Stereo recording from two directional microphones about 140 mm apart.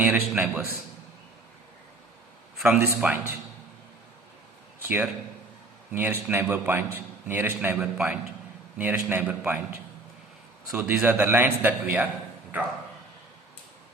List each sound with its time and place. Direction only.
0.0 s a man's voice: 10° right (ahead or behind)
2.6 s a man's voice: 10° right (ahead or behind)
4.8 s a man's voice: 15° right (ahead or behind)
10.7 s a man's voice: 5° right (ahead or behind)